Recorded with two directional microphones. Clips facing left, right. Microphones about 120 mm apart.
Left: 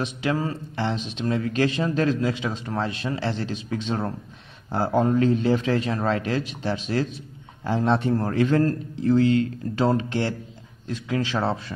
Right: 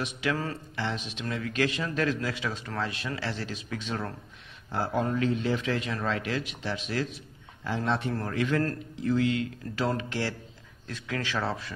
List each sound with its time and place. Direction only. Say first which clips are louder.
0.0 s speech: left 5 dB; 30° left (ahead or behind)